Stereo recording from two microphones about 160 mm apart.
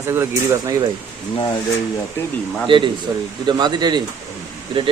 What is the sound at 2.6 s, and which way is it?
Speech, 30° right (ahead or behind).